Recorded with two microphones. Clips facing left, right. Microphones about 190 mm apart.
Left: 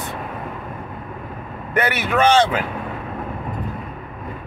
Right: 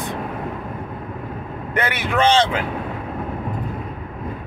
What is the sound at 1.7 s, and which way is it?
Speech, 20° right (ahead or behind).